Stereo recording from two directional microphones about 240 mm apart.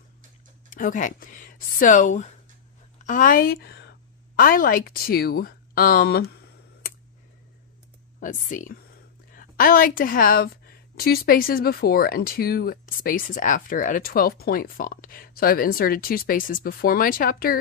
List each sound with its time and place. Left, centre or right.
0.7 s speech: left
8.2 s a woman's voice: left